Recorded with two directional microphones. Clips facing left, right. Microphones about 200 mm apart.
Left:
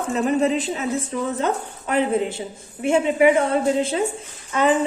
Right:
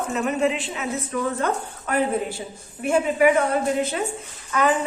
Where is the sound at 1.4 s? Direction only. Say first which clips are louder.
Left 2 dB; 20° left (ahead or behind).